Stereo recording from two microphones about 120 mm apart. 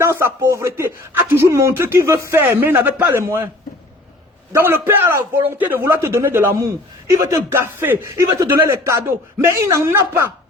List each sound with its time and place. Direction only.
0.0 s a man's voice: 20° right (ahead or behind)
4.5 s a man's voice: 20° right (ahead or behind)